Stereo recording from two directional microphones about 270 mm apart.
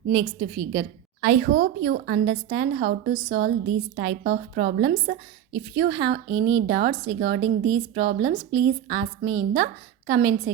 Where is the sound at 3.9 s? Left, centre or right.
Right.